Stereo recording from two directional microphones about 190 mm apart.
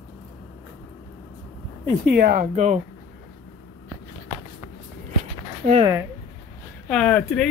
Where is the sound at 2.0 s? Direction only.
55° right (ahead or behind).